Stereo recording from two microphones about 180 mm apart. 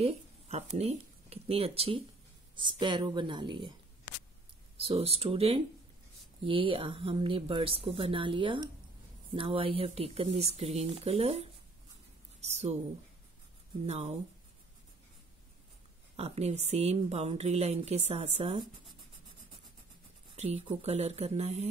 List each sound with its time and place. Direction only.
0.0 s speech: 35° right (ahead or behind)
4.7 s speech: 30° right (ahead or behind)
13.8 s speech: 35° right (ahead or behind)
16.2 s speech: 35° right (ahead or behind)
20.3 s speech: 40° right (ahead or behind)